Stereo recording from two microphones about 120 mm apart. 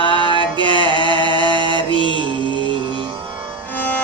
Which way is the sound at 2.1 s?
40° right (ahead or behind).